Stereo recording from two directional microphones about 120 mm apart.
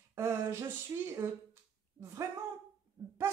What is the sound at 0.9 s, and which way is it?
Speech, 30° right (ahead or behind).